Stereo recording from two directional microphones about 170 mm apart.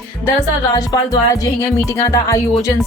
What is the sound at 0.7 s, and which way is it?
A woman's voice, 20° left (ahead or behind).